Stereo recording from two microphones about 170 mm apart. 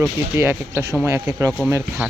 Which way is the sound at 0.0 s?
10° right (ahead or behind).